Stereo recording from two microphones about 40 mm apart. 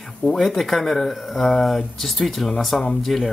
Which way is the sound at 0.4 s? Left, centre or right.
Centre.